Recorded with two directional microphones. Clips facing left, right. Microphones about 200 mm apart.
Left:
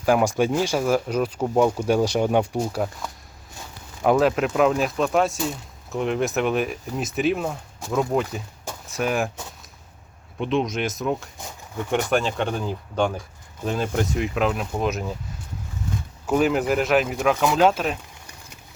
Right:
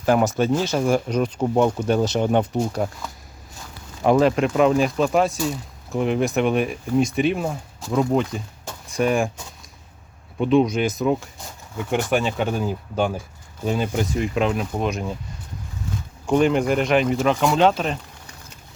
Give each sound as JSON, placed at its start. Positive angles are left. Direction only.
{"t": 0.0, "sound": "speech", "side_deg": 10}
{"t": 4.0, "sound": "speech", "side_deg": 0}
{"t": 10.3, "sound": "speech", "side_deg": 0}
{"t": 16.2, "sound": "speech", "side_deg": 5}